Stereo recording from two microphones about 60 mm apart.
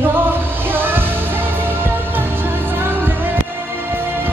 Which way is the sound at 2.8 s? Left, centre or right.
Right.